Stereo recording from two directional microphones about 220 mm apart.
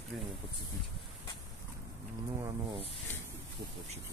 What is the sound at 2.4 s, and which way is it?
Speech, 20° right (ahead or behind).